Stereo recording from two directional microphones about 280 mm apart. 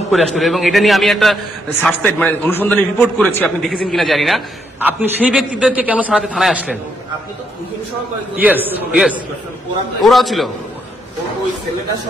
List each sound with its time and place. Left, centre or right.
0.1 s a man's voice: centre
8.4 s a man's voice: centre